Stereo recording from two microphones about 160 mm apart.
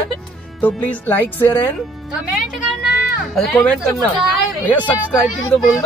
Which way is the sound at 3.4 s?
Centre (ahead or behind).